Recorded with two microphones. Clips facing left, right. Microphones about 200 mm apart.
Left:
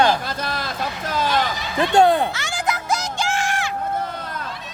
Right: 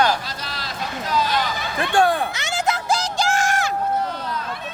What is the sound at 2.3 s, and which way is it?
Music, 20° right (ahead or behind).